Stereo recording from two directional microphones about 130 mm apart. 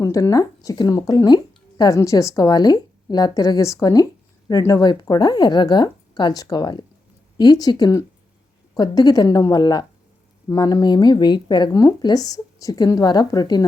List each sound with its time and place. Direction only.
0.0 s a woman's voice: 25° left (ahead or behind)